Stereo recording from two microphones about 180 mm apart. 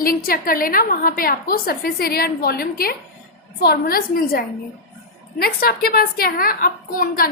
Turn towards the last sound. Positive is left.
turn(degrees=50)  # may be behind; listen again after turning